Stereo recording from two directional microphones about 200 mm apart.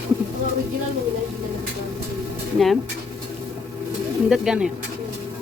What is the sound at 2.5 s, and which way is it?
Speech, centre (ahead or behind).